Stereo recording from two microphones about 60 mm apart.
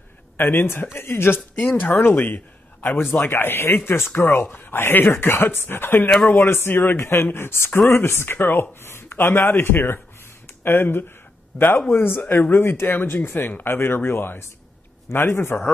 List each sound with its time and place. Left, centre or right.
0.4 s a man's voice: left
1.9 s a man's voice: left